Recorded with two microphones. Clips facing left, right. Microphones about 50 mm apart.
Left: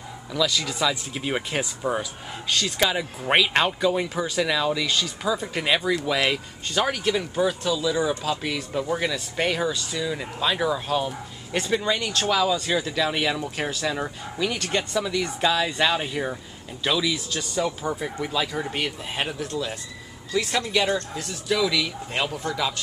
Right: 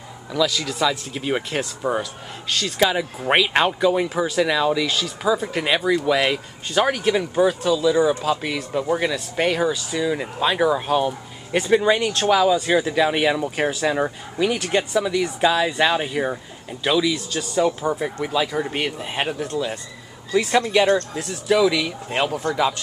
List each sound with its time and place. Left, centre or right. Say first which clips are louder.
0.3 s speech: right 3 dB; centre